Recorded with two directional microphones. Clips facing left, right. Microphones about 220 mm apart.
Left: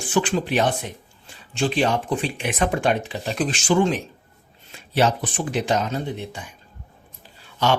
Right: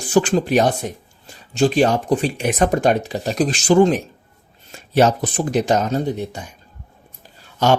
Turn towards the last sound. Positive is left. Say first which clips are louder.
# right 5 dB
turn(degrees=-45)  # may be behind; listen again after turning